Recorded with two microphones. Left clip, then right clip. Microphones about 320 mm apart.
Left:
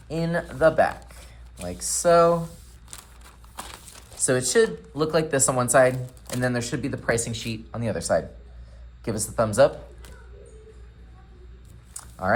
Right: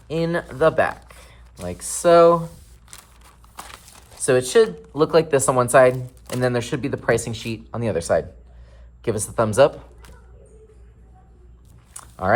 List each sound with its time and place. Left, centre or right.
0.1 s speech: right
2.9 s a sound: centre
4.4 s speech: right